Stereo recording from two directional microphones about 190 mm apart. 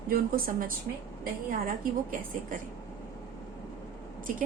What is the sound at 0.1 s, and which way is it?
A woman's voice, 50° right (ahead or behind).